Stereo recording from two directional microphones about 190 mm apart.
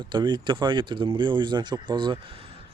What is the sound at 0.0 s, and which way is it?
Speech, 25° right (ahead or behind).